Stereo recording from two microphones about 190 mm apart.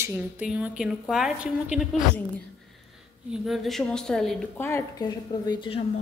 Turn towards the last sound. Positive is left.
turn(degrees=25)  # may be behind; listen again after turning